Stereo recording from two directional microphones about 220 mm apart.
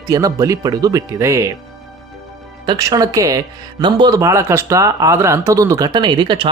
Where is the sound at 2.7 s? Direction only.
15° right (ahead or behind).